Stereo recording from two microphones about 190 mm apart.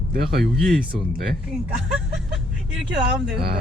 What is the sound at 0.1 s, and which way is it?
Speech, 55° right (ahead or behind).